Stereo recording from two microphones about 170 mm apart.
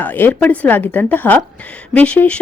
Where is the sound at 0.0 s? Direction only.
10° left (ahead or behind).